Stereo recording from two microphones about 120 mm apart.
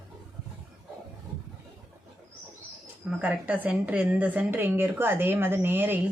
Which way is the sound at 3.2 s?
10° right (ahead or behind).